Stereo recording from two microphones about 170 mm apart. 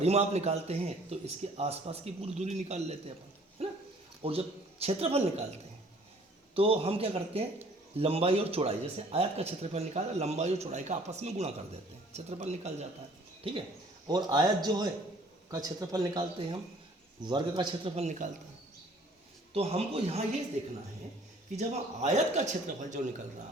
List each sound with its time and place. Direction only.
0.0 s speech: 40° right (ahead or behind)
19.5 s speech: 35° right (ahead or behind)
21.5 s speech: 40° right (ahead or behind)